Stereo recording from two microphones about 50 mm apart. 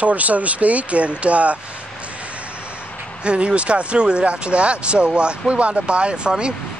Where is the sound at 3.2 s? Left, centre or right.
Right.